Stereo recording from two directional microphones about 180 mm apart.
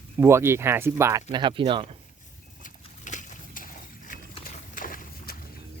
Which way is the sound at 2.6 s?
45° left (ahead or behind).